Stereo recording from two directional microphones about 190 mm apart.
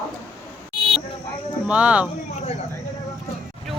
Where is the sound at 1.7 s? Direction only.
5° right (ahead or behind).